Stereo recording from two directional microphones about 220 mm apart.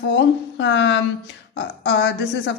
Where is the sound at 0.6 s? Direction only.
55° left (ahead or behind).